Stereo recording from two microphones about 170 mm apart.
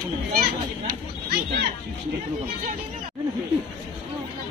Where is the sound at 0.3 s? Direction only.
65° right (ahead or behind).